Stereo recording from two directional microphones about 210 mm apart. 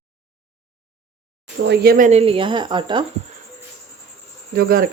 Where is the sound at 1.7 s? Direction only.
45° right (ahead or behind); by 3.0 s 25° right (ahead or behind).